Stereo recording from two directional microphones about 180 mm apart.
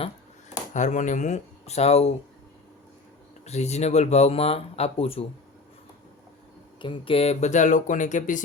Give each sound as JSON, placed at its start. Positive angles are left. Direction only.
{"t": 0.7, "sound": "speech", "side_deg": 45}
{"t": 3.4, "sound": "speech", "side_deg": 35}
{"t": 6.7, "sound": "speech", "side_deg": 30}